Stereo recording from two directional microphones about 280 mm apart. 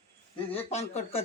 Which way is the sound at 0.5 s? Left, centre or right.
Left.